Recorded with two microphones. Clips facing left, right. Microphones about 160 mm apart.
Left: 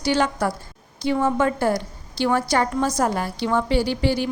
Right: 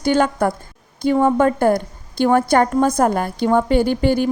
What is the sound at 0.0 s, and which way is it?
A woman's voice, 50° right (ahead or behind).